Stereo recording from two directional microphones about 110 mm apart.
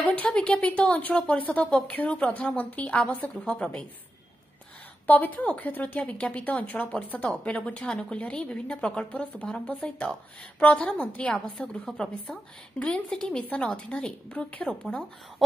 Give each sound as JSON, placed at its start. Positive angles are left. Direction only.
{"t": 0.1, "sound": "a woman's voice", "side_deg": 10}
{"t": 5.0, "sound": "a woman's voice", "side_deg": 15}